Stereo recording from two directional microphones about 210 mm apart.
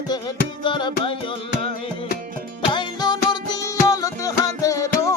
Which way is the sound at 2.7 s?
20° left (ahead or behind).